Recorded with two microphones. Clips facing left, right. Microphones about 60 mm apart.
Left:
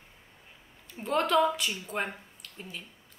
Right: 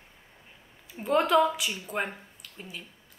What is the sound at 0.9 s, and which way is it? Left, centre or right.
Speech, centre.